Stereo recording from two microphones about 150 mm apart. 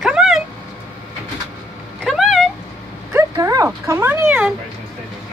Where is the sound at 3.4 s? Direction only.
20° right (ahead or behind).